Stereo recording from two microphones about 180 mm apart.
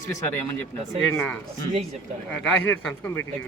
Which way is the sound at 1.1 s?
5° left (ahead or behind).